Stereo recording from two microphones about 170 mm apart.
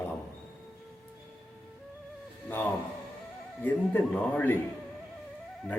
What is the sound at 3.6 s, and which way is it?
Speech, 10° left (ahead or behind).